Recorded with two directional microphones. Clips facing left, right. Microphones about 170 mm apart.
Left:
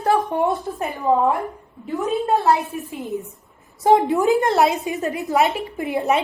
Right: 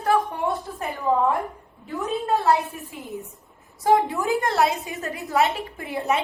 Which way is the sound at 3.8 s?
25° left (ahead or behind).